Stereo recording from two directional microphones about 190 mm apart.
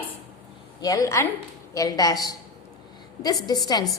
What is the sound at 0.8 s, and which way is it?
A woman's voice, 20° left (ahead or behind).